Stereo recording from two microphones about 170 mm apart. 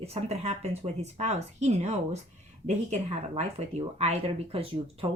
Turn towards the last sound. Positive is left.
turn(degrees=-35)  # may be behind; listen again after turning